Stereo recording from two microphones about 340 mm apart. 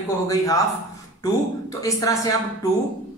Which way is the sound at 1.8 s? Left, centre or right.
Centre.